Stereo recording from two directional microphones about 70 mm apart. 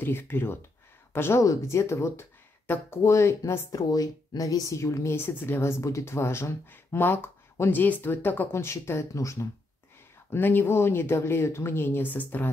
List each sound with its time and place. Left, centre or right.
0.0 s speech: left
1.4 s speech: left
3.7 s speech: left
5.2 s speech: left
10.3 s speech: left